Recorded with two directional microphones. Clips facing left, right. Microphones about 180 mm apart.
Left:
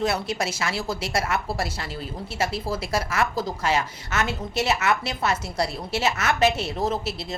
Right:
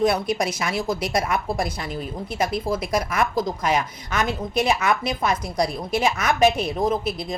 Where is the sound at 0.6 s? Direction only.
15° right (ahead or behind).